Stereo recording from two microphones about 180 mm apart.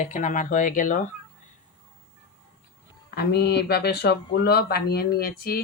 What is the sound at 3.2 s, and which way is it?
Speech, 65° left (ahead or behind).